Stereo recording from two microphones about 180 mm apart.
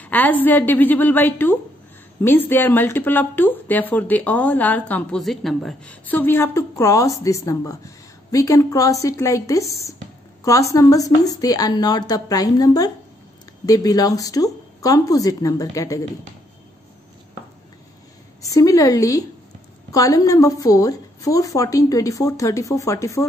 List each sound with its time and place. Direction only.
0.0 s a woman's voice: 10° left (ahead or behind)
18.4 s a woman's voice: 20° left (ahead or behind)